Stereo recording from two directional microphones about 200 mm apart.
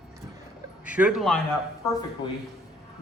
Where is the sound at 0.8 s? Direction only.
5° right (ahead or behind).